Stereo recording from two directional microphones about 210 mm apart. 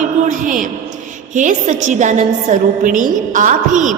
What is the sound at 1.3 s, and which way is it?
A woman's voice, 35° right (ahead or behind).